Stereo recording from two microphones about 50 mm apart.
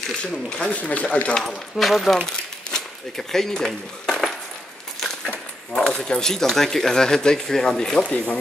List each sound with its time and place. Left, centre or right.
0.2 s speech: left
1.5 s speech: centre
5.3 s speech: centre
8.0 s speech: left